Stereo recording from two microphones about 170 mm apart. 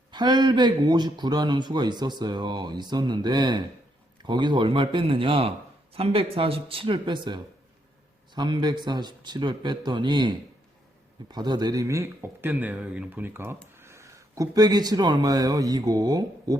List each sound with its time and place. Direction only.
0.1 s a man's voice: 25° right (ahead or behind)